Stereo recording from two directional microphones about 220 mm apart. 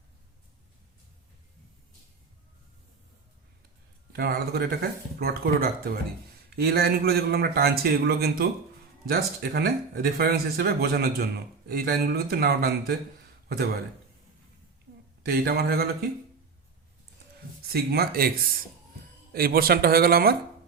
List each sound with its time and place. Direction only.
4.1 s speech: 45° right (ahead or behind)
15.2 s speech: 45° right (ahead or behind)
17.7 s speech: 45° right (ahead or behind)
19.3 s speech: 45° right (ahead or behind)